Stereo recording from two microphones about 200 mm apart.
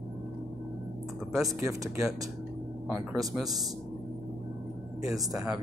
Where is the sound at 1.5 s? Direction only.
15° right (ahead or behind).